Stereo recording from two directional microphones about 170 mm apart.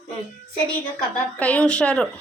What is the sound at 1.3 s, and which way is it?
Speech, 10° left (ahead or behind).